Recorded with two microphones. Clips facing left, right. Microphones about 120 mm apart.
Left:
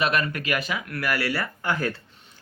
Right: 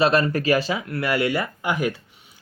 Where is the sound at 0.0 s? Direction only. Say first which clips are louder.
Right 6 dB; 30° right (ahead or behind).